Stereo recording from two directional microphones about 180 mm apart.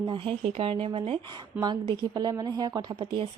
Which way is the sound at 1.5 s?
10° right (ahead or behind).